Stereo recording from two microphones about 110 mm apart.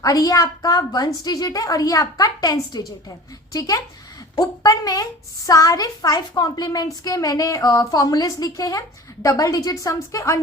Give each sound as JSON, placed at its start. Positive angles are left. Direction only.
{"t": 0.0, "sound": "a woman's voice", "side_deg": 30}